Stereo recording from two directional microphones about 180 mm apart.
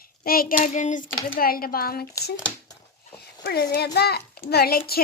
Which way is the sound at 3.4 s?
65° left (ahead or behind).